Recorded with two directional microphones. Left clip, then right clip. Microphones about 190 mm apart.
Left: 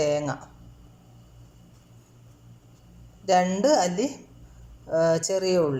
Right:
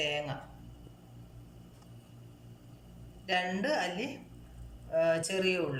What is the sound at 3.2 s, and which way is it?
Speech, 30° left (ahead or behind).